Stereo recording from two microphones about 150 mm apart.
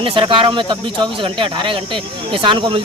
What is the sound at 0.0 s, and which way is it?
Speech, 35° right (ahead or behind).